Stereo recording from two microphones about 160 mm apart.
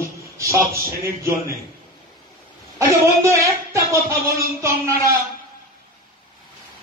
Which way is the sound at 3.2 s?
20° right (ahead or behind).